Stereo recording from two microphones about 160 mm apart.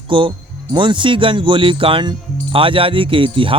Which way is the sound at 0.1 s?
30° right (ahead or behind).